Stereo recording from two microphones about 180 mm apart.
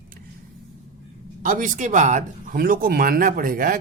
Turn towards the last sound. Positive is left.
turn(degrees=-50)  # may be behind; listen again after turning